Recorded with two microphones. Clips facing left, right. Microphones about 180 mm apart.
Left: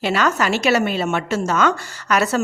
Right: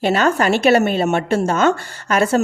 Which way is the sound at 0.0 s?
45° right (ahead or behind).